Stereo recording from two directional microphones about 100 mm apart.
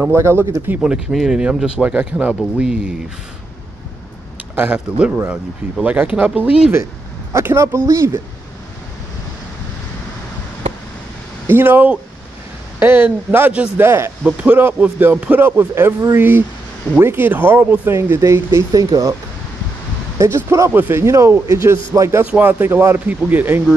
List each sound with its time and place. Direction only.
0.1 s speech: 25° right (ahead or behind)
0.8 s speech: 5° right (ahead or behind)
4.6 s speech: 15° right (ahead or behind)
7.3 s speech: 25° right (ahead or behind)
11.4 s speech: 20° right (ahead or behind)
20.2 s speech: 25° right (ahead or behind)